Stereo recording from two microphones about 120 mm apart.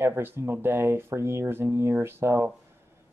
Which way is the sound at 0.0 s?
15° right (ahead or behind).